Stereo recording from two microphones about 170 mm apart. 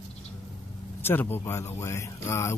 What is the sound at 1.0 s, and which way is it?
Speech, 10° left (ahead or behind).